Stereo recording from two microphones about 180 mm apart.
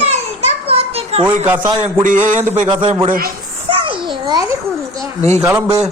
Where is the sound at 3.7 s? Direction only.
30° right (ahead or behind).